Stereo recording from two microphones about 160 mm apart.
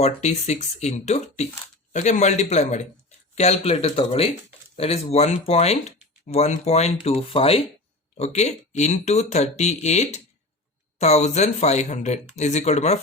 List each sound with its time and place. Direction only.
0.0 s speech: 45° left (ahead or behind)